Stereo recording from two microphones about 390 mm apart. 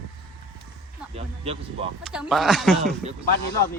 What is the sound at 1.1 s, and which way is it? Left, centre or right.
Speech, centre.